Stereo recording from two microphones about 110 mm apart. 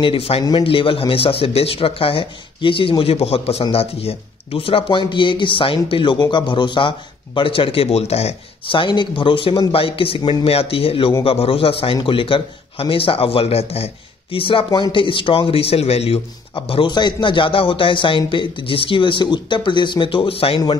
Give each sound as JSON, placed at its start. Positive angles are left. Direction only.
{"t": 0.0, "sound": "a man's voice", "side_deg": 55}
{"t": 0.4, "sound": "a man's voice", "side_deg": 45}
{"t": 8.6, "sound": "a man's voice", "side_deg": 50}
{"t": 16.5, "sound": "speech", "side_deg": 55}